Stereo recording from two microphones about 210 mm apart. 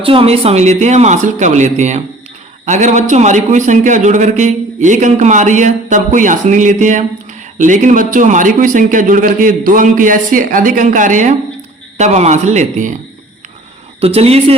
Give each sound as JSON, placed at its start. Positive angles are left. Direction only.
{"t": 0.0, "sound": "a man's voice", "side_deg": -25}
{"t": 14.0, "sound": "speech", "side_deg": -30}